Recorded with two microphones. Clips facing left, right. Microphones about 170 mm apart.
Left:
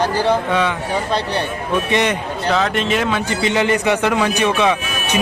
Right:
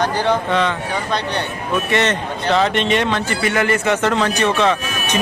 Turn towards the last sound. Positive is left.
turn(degrees=10)  # may be behind; listen again after turning